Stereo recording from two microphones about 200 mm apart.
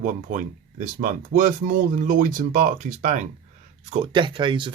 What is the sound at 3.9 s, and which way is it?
Speech, 30° right (ahead or behind).